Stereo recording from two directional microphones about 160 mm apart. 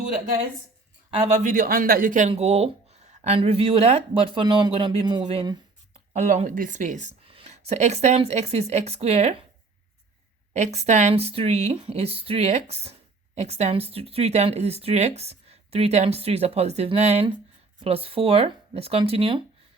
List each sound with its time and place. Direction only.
1.1 s speech: 35° right (ahead or behind)
1.4 s a man's voice: 60° right (ahead or behind)
2.3 s speech: 40° right (ahead or behind)
6.1 s speech: 50° right (ahead or behind)
7.3 s speech: 35° right (ahead or behind)
10.5 s speech: 45° right (ahead or behind)